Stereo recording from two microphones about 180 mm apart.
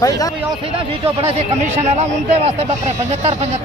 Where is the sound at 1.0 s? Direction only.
35° right (ahead or behind).